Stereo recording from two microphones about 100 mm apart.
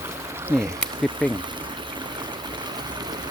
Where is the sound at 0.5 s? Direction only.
25° right (ahead or behind).